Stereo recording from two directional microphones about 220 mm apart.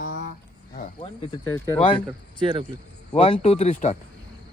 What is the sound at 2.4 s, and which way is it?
Speech, 20° right (ahead or behind).